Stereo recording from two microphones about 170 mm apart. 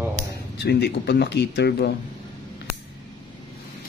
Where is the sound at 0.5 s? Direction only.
75° left (ahead or behind).